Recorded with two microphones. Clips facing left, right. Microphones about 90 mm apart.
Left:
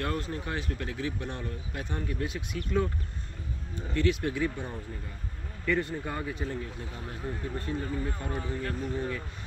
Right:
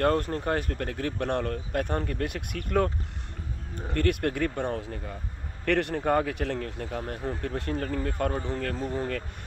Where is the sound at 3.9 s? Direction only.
55° right (ahead or behind).